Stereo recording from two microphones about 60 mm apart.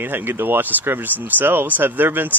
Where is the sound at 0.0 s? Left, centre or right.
Right.